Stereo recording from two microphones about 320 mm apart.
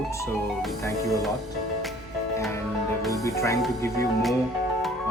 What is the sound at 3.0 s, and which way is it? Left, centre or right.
Speech, centre.